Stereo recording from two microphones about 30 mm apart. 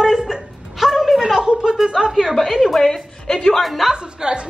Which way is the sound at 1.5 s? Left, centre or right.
Right.